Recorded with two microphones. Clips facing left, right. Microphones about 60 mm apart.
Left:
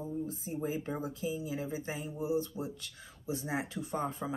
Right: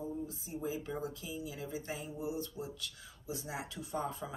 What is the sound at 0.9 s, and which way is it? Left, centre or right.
Speech, left.